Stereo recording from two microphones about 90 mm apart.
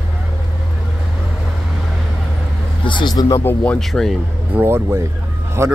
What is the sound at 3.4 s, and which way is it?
Speech, 20° left (ahead or behind).